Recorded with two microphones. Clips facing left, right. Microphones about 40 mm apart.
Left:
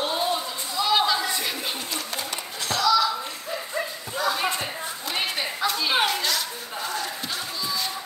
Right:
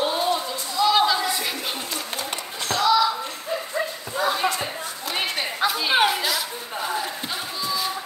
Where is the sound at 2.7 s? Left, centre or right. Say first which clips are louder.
Right 2 dB; right.